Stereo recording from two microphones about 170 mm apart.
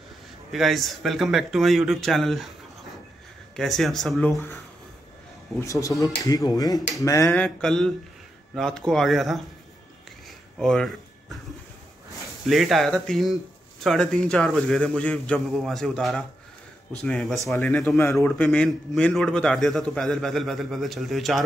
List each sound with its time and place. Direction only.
0.5 s a man's voice: centre (ahead or behind)
3.5 s a man's voice: centre (ahead or behind)
4.3 s speech: 15° left (ahead or behind)
5.6 s a man's voice: 20° left (ahead or behind); by 9.4 s centre (ahead or behind)
10.6 s speech: centre (ahead or behind)
12.4 s a man's voice: centre (ahead or behind)